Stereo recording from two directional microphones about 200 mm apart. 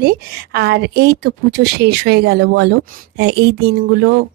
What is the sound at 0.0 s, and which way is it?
A woman's voice, 50° right (ahead or behind).